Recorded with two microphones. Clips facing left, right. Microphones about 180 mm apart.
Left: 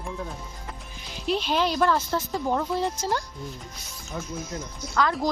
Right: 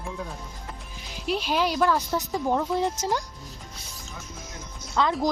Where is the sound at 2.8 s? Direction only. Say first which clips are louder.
Right 1 dB; 15° right (ahead or behind).